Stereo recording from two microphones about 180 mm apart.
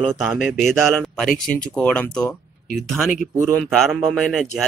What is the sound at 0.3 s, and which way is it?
Speech, 5° right (ahead or behind).